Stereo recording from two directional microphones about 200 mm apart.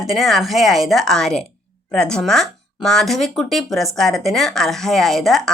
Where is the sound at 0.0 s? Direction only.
Centre (ahead or behind).